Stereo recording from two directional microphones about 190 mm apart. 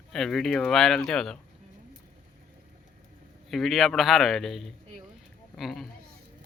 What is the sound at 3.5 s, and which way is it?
Speech, centre (ahead or behind).